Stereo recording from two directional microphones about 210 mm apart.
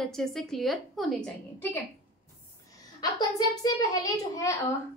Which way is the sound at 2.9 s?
20° left (ahead or behind).